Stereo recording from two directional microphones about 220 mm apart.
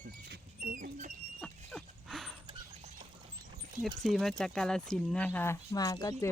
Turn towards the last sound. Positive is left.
turn(degrees=15)  # may be behind; listen again after turning